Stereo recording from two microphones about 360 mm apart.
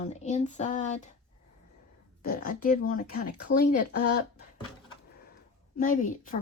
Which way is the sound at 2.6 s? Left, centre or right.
Left.